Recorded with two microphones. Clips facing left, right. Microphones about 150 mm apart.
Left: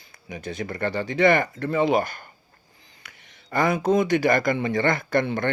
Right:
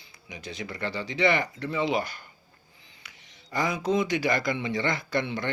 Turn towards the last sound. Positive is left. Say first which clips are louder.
# left 6 dB
turn(degrees=50)  # may be behind; listen again after turning